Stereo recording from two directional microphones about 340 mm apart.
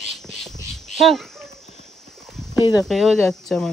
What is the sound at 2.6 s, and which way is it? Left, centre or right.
Speech, centre.